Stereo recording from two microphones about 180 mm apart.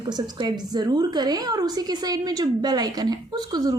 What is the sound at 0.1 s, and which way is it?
A woman's voice, 25° right (ahead or behind).